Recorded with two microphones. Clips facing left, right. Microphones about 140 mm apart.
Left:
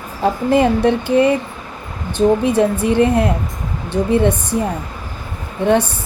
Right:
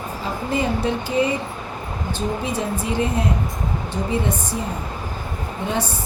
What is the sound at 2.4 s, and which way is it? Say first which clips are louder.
Speech: left 9 dB; 65° left (ahead or behind).